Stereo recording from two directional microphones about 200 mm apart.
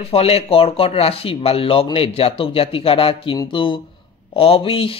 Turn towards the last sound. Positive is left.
turn(degrees=30)  # may be behind; listen again after turning